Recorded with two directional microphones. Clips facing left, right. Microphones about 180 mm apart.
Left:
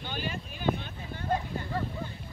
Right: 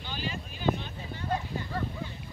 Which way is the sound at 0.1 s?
50° left (ahead or behind).